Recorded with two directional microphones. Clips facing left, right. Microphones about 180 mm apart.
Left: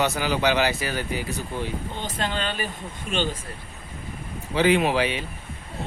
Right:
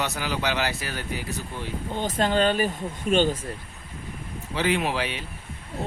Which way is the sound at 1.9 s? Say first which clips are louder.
Right 10 dB; 45° right (ahead or behind).